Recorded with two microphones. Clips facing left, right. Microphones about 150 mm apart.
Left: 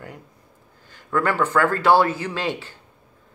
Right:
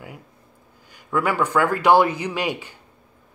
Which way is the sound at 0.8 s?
15° right (ahead or behind).